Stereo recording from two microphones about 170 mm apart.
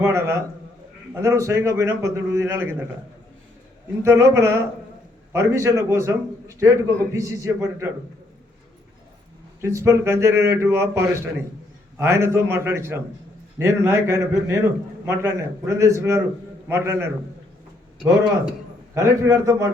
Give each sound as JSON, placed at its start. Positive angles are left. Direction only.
{"t": 0.0, "sound": "a man's voice", "side_deg": -15}
{"t": 4.0, "sound": "a man's voice", "side_deg": -15}
{"t": 9.6, "sound": "a man's voice", "side_deg": -15}
{"t": 18.9, "sound": "a man's voice", "side_deg": -20}